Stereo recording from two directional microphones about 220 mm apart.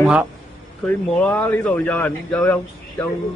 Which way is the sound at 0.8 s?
5° left (ahead or behind).